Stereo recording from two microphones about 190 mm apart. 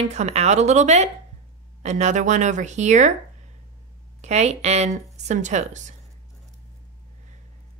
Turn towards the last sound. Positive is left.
turn(degrees=-40)  # may be behind; listen again after turning